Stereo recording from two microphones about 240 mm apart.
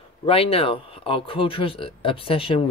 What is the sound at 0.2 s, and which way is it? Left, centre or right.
Speech, left.